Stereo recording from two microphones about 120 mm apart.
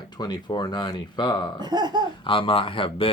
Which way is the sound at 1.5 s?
35° right (ahead or behind).